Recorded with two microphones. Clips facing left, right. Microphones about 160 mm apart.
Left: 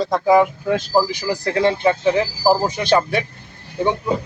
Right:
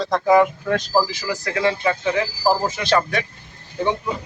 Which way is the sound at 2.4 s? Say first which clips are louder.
Left 3 dB; 5° left (ahead or behind).